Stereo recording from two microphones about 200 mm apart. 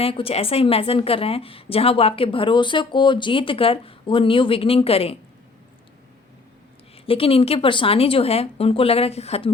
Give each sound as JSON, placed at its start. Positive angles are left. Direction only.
{"t": 0.0, "sound": "a woman's voice", "side_deg": 30}
{"t": 6.9, "sound": "a woman's voice", "side_deg": 30}